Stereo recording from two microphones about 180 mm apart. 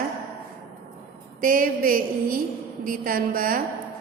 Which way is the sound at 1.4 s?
50° right (ahead or behind).